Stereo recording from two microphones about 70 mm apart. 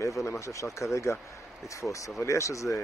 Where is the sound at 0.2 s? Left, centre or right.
Left.